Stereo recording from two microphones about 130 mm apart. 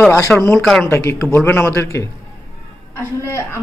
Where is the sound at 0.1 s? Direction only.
20° left (ahead or behind).